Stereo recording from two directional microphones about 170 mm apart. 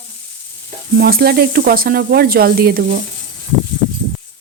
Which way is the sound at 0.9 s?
60° right (ahead or behind).